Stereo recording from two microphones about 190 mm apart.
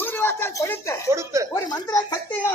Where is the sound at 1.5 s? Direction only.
20° left (ahead or behind).